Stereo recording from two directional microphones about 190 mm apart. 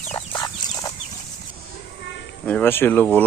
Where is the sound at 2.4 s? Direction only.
10° left (ahead or behind).